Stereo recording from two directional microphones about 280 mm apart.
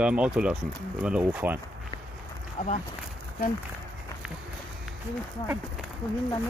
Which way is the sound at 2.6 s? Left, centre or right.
Left.